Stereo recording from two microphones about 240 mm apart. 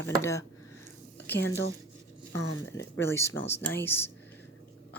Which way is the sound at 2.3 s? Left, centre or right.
Left.